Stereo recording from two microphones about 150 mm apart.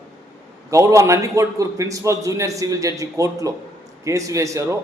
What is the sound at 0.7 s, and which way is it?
A man's voice, 20° right (ahead or behind).